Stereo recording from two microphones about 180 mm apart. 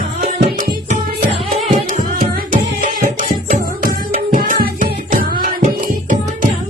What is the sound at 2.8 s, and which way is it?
Music, 45° right (ahead or behind).